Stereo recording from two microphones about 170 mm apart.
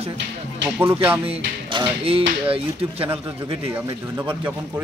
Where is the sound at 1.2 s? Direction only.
30° right (ahead or behind).